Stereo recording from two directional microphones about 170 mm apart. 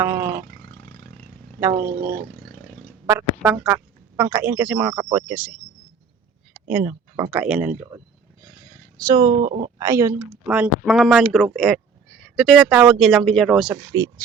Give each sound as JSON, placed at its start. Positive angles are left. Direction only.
{"t": 0.0, "sound": "speech", "side_deg": -15}
{"t": 0.6, "sound": "roar", "side_deg": 10}
{"t": 1.8, "sound": "speech", "side_deg": -60}
{"t": 2.3, "sound": "vehicle", "side_deg": 10}
{"t": 3.1, "sound": "speech", "side_deg": -10}
{"t": 6.7, "sound": "speech", "side_deg": -10}
{"t": 9.0, "sound": "speech", "side_deg": -25}